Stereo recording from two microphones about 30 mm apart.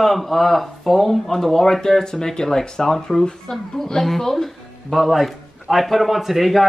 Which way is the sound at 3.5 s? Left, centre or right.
Left.